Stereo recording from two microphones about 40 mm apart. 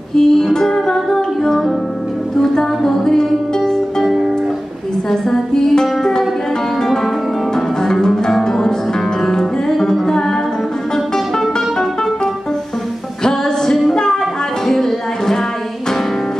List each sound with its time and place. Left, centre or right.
0.1 s music: centre
5.1 s music: centre
7.5 s music: centre
13.2 s music: centre
14.7 s a sound: centre